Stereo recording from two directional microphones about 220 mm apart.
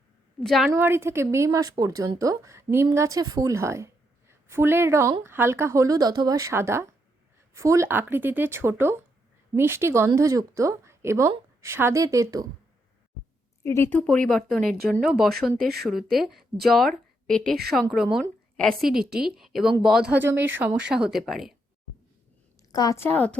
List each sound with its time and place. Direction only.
0.3 s speech: centre (ahead or behind)
0.7 s a woman's voice: 10° right (ahead or behind)
13.7 s speech: 10° left (ahead or behind)
18.9 s a woman's voice: 45° right (ahead or behind)
19.4 s speech: centre (ahead or behind)
22.7 s a woman's voice: 15° left (ahead or behind)